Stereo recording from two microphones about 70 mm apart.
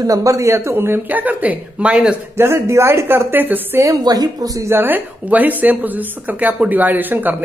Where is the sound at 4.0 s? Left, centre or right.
Right.